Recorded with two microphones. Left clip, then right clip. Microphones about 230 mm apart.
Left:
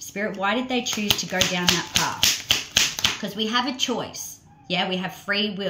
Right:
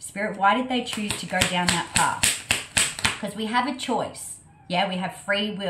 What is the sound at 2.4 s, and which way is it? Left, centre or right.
Tap, centre.